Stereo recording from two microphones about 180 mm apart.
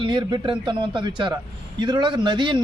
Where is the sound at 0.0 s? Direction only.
25° right (ahead or behind).